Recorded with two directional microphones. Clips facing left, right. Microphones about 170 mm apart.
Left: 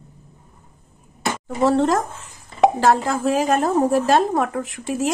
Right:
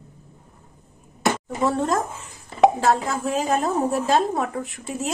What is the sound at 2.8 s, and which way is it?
A woman's voice, 90° left.